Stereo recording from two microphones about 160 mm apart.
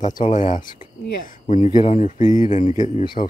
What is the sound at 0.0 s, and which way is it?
Speech, 50° left (ahead or behind).